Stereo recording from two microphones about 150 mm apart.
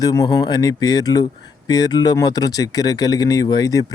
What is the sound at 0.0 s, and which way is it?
Speech, 25° left (ahead or behind).